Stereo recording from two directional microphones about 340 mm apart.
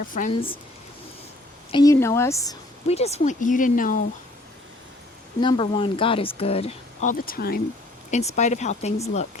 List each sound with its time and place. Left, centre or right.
0.0 s speech: left
1.7 s speech: centre
5.4 s speech: centre